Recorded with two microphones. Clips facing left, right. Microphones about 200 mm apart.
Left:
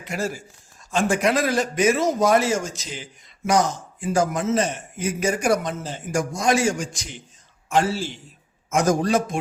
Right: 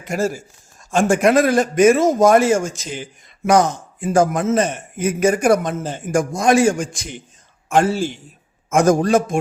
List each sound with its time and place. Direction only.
0.0 s a man's voice: 45° right (ahead or behind)